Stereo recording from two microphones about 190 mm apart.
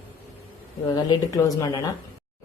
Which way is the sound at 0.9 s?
20° left (ahead or behind).